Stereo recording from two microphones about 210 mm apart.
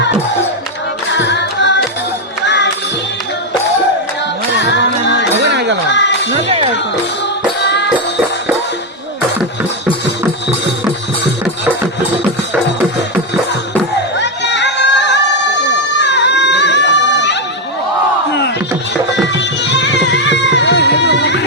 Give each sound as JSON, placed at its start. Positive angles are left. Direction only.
{"t": 1.1, "sound": "carnatic music", "side_deg": 55}
{"t": 4.6, "sound": "music", "side_deg": 55}
{"t": 5.4, "sound": "music", "side_deg": -55}
{"t": 5.9, "sound": "music", "side_deg": 60}
{"t": 7.6, "sound": "music", "side_deg": 55}
{"t": 14.2, "sound": "a sound", "side_deg": 55}
{"t": 19.4, "sound": "music", "side_deg": 55}